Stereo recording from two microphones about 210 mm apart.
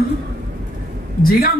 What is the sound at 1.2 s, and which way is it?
Speech, 45° left (ahead or behind).